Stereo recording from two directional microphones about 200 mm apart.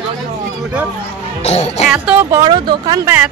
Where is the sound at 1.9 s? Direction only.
5° right (ahead or behind).